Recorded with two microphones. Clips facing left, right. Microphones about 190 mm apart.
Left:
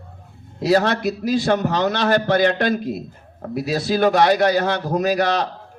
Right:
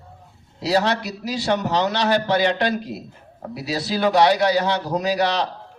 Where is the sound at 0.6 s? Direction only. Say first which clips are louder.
Left 3 dB; 50° left (ahead or behind).